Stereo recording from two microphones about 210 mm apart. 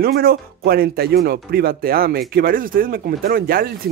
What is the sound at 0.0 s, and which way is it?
Speech, 45° right (ahead or behind).